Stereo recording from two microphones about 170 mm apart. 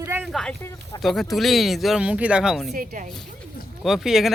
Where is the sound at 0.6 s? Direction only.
15° left (ahead or behind).